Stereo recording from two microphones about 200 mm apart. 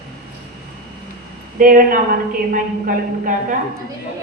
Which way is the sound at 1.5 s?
45° right (ahead or behind).